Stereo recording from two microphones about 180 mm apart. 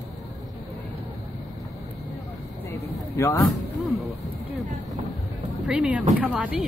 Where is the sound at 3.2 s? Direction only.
15° left (ahead or behind).